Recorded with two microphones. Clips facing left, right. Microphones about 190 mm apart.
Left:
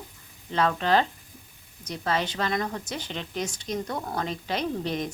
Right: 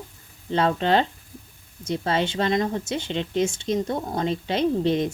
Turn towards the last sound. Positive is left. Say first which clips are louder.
# right 8 dB
turn(degrees=-25)  # may be behind; listen again after turning